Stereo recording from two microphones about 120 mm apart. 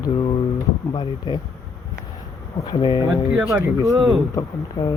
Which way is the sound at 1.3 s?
35° left (ahead or behind).